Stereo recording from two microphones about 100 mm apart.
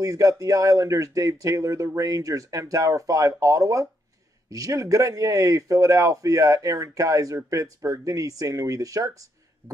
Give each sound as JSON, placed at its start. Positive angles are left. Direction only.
{"t": 0.0, "sound": "a man's voice", "side_deg": -35}